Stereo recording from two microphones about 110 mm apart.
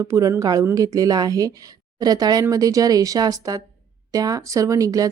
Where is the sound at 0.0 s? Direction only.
30° right (ahead or behind).